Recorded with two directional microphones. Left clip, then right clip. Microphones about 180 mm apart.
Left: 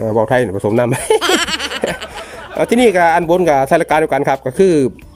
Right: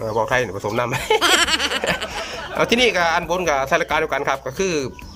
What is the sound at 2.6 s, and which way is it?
Speech, 35° left (ahead or behind).